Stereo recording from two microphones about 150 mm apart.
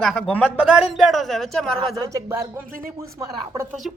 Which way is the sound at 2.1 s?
20° right (ahead or behind).